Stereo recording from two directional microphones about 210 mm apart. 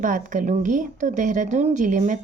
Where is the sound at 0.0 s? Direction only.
40° right (ahead or behind).